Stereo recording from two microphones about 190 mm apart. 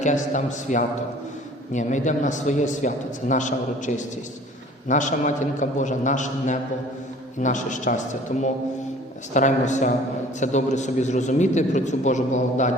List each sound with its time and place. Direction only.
0.0 s a man's voice: 40° left (ahead or behind)